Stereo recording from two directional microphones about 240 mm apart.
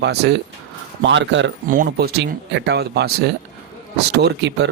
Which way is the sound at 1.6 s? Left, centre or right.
Right.